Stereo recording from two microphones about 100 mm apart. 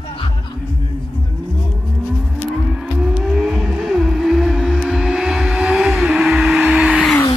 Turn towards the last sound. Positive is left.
turn(degrees=-10)  # may be behind; listen again after turning